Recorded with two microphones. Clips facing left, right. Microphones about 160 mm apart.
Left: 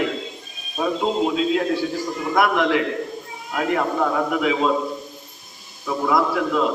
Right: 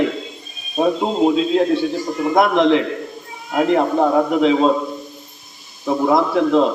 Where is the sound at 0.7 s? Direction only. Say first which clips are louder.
Right 4 dB; 30° right (ahead or behind).